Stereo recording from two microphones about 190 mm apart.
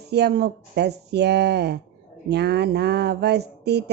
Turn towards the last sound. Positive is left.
turn(degrees=-60)  # may be behind; listen again after turning